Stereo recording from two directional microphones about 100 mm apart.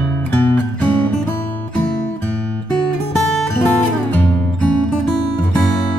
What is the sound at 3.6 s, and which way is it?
Music, 20° left (ahead or behind).